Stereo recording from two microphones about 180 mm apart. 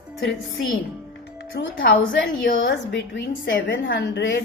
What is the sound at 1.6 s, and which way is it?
A woman's voice, 65° left (ahead or behind).